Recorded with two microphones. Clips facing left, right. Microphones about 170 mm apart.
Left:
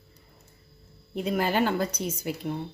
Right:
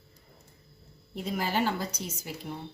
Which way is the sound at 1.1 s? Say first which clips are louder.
Left 5 dB; 60° left (ahead or behind).